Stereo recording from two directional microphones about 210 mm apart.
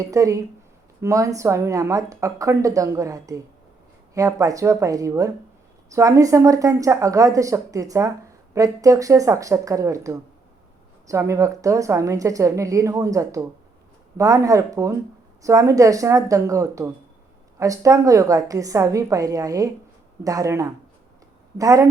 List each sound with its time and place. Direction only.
0.0 s a woman's voice: 15° right (ahead or behind)